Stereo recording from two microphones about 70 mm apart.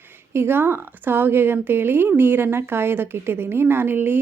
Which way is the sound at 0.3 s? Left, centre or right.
Right.